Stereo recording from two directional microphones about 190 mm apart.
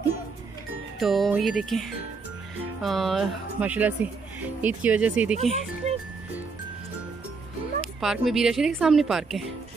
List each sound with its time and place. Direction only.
0.9 s a woman's voice: centre (ahead or behind)
5.8 s music: 35° right (ahead or behind)
8.0 s a woman's voice: centre (ahead or behind)